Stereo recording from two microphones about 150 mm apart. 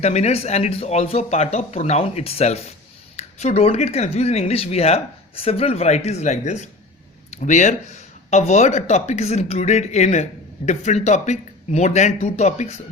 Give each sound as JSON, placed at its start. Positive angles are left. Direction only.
{"t": 0.0, "sound": "speech", "side_deg": 45}